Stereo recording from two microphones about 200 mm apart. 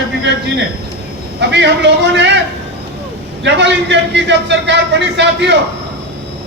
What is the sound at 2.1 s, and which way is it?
Speech, 60° right (ahead or behind).